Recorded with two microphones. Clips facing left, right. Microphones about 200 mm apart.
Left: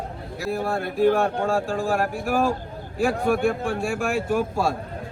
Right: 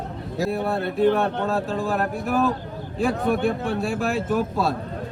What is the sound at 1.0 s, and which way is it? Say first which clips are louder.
Speech: left 1 dB; 10° left (ahead or behind).